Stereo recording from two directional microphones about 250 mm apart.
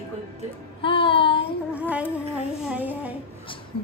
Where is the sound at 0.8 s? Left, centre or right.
Left.